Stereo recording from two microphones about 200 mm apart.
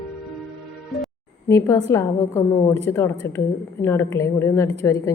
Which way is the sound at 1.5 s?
15° left (ahead or behind).